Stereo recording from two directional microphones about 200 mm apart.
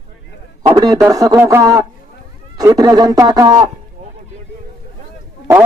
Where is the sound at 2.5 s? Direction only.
20° right (ahead or behind).